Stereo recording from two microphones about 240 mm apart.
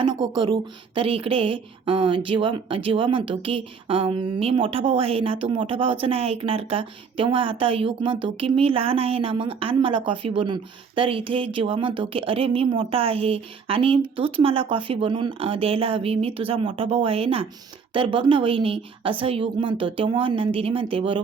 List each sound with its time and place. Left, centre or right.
0.0 s speech: centre